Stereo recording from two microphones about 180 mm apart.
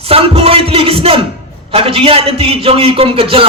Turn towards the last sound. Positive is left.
turn(degrees=-30)  # may be behind; listen again after turning